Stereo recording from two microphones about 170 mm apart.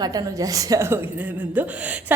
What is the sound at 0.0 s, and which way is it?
A woman's voice, 20° right (ahead or behind).